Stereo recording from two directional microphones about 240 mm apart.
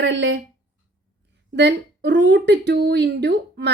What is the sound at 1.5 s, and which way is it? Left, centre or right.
A woman's voice, right.